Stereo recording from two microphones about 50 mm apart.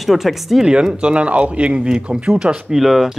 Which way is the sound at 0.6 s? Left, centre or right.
Centre.